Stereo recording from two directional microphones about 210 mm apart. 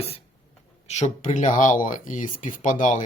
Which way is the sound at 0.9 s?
35° left (ahead or behind).